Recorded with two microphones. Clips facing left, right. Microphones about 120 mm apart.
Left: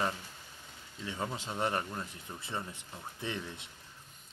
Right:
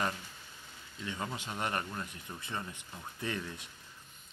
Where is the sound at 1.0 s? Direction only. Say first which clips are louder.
Left 1 dB; 30° left (ahead or behind).